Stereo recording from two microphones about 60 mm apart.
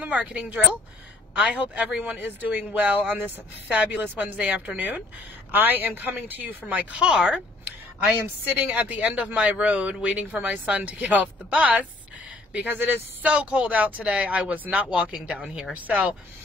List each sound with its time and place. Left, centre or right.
0.0 s speech: right
1.4 s speech: right
7.0 s speech: centre
8.5 s speech: right
12.6 s speech: right
13.3 s speech: centre
15.4 s speech: centre
15.7 s speech: right